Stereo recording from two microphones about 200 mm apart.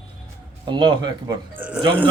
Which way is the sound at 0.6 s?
20° right (ahead or behind).